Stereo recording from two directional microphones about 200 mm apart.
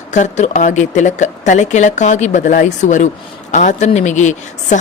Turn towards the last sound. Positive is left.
turn(degrees=35)  # may be behind; listen again after turning